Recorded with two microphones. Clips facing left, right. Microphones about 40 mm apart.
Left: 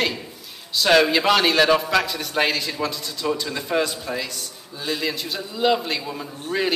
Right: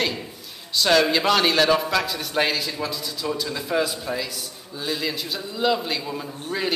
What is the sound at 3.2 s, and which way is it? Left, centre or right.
A man's voice, centre.